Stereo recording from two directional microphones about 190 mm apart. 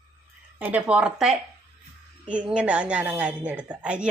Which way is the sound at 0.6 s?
10° right (ahead or behind).